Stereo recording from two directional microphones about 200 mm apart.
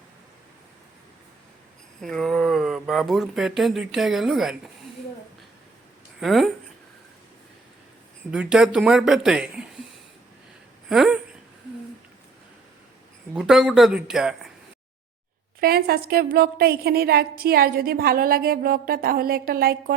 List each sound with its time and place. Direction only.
2.0 s speech: centre (ahead or behind)
6.1 s speech: centre (ahead or behind)
8.3 s speech: 5° right (ahead or behind)
10.8 s speech: centre (ahead or behind)
13.3 s speech: centre (ahead or behind)
15.6 s a woman's voice: 50° right (ahead or behind)